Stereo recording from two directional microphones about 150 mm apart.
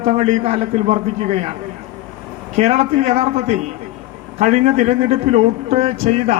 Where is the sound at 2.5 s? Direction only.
45° right (ahead or behind).